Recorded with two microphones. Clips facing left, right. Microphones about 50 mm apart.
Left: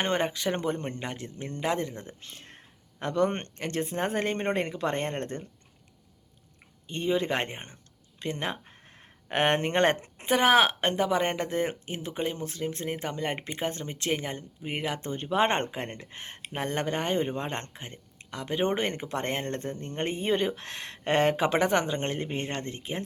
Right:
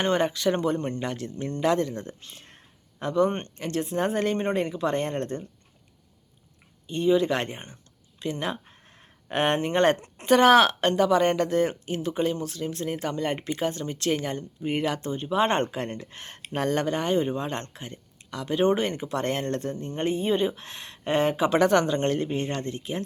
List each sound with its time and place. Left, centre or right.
0.0 s speech: left
3.0 s speech: left
6.8 s speech: left
8.7 s a sound: left
9.3 s speech: left
10.0 s speech: centre
15.1 s speech: left
15.7 s speech: left
20.0 s speech: left
21.6 s speech: left
22.3 s speech: left